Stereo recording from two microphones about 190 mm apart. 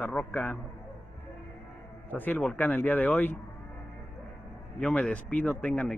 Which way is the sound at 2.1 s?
10° left (ahead or behind).